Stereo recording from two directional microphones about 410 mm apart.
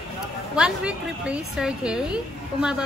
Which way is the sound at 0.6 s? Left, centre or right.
Centre.